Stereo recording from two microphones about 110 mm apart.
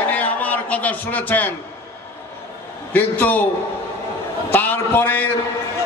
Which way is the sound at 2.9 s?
15° left (ahead or behind).